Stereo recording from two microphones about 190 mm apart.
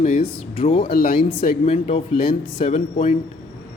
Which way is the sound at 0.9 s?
50° left (ahead or behind).